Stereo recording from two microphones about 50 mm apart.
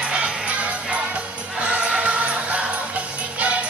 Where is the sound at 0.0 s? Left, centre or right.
Right.